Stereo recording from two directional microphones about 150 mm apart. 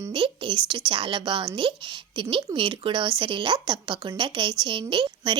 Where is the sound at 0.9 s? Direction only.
35° right (ahead or behind).